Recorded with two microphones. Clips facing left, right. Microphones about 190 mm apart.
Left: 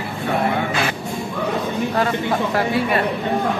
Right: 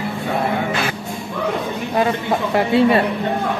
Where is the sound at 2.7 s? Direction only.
25° right (ahead or behind).